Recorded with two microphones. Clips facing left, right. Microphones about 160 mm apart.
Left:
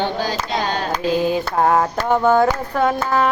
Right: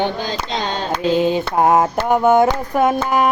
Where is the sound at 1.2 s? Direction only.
20° right (ahead or behind).